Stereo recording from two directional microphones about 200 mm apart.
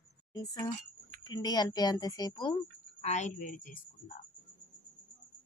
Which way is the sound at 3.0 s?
35° left (ahead or behind).